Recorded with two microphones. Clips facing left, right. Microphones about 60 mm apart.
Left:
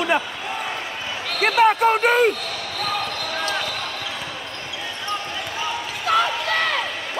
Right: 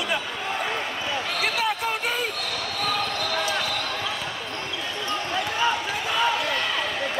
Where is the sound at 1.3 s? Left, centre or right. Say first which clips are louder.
Left 12 dB; left.